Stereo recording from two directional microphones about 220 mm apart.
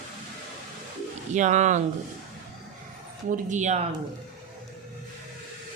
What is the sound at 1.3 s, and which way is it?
Speech, 35° right (ahead or behind).